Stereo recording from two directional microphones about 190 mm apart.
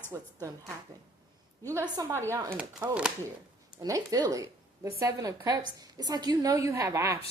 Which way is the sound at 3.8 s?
20° right (ahead or behind).